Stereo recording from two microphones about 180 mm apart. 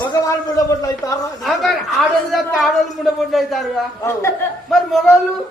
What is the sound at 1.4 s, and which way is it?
A woman's voice, centre (ahead or behind).